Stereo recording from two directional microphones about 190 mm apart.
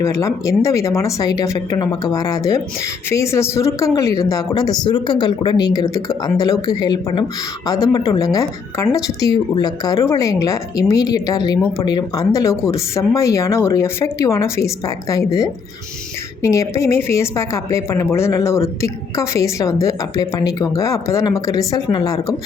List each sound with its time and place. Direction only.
0.0 s a woman's voice: 15° left (ahead or behind)